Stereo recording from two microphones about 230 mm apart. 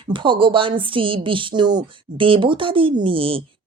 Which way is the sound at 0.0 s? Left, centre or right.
Right.